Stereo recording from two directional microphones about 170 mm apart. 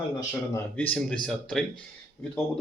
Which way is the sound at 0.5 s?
10° left (ahead or behind).